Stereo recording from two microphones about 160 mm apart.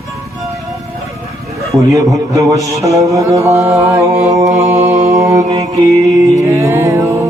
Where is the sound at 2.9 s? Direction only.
20° right (ahead or behind).